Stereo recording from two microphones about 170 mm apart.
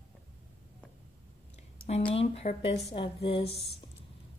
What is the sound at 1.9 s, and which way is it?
A woman's voice, 35° left (ahead or behind).